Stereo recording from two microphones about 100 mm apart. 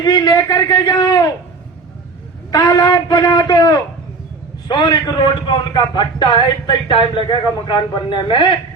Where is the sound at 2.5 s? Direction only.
40° left (ahead or behind).